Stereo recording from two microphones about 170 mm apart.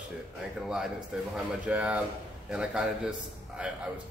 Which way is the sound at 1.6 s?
5° right (ahead or behind).